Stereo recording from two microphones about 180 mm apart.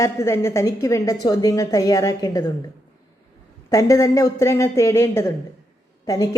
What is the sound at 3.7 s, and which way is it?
A woman's voice, 15° left (ahead or behind).